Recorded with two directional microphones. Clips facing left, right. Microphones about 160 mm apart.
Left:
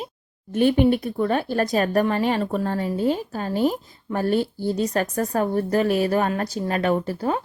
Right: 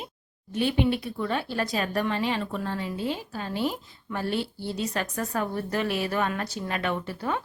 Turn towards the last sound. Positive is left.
turn(degrees=40)  # may be behind; listen again after turning